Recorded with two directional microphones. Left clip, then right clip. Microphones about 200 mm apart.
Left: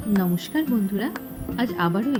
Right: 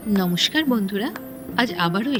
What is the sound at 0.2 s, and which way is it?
Speech, 40° right (ahead or behind).